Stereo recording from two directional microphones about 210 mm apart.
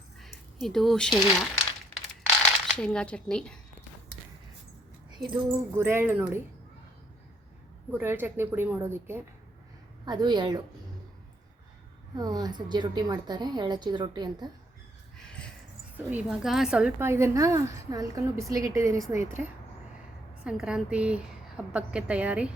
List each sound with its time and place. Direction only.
0.2 s speech: centre (ahead or behind)
2.6 s a woman's voice: 5° left (ahead or behind)
5.2 s a woman's voice: centre (ahead or behind)
5.7 s a woman's voice: 10° right (ahead or behind)
7.9 s a woman's voice: 10° right (ahead or behind)
12.1 s a woman's voice: 20° right (ahead or behind)
15.2 s a sound: 5° left (ahead or behind)
16.0 s a woman's voice: 5° right (ahead or behind)